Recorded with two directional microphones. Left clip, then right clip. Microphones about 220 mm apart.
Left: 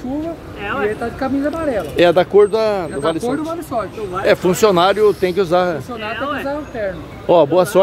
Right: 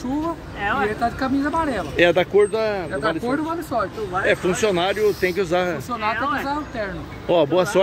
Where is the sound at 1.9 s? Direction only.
20° left (ahead or behind).